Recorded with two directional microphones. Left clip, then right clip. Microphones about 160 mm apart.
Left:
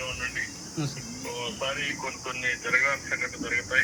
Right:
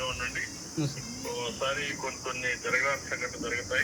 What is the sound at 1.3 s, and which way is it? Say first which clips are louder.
Speech: even; 15° right (ahead or behind).